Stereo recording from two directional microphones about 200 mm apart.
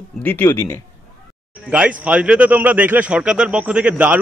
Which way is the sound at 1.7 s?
5° right (ahead or behind).